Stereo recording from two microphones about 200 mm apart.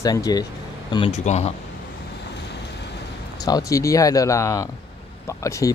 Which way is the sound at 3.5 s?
15° left (ahead or behind).